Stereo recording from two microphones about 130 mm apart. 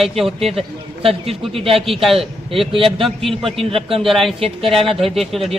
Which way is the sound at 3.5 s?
45° right (ahead or behind).